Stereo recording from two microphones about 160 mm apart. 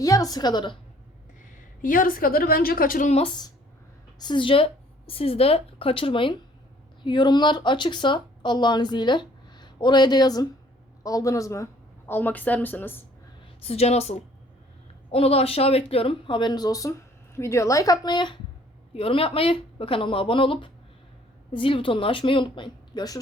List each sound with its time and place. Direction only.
0.0 s speech: 20° left (ahead or behind)
1.8 s a woman's voice: 60° left (ahead or behind)
3.1 s a woman's voice: 40° left (ahead or behind); by 13.0 s 10° left (ahead or behind)
13.6 s speech: 40° left (ahead or behind)